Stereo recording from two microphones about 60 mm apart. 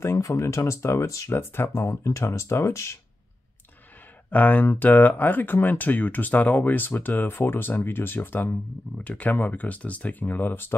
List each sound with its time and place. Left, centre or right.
0.2 s speech: left
4.3 s speech: left
8.9 s speech: left